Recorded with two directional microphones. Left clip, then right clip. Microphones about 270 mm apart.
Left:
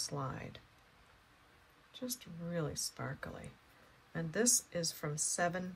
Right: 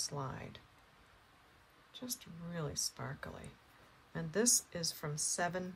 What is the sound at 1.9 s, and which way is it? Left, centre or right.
Speech, centre.